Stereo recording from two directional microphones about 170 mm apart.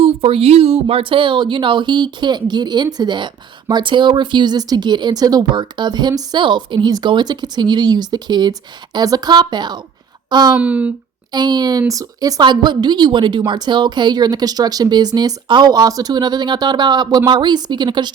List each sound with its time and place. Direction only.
0.0 s speech: 35° right (ahead or behind)
10.6 s speech: 10° right (ahead or behind)
11.3 s speech: 25° right (ahead or behind)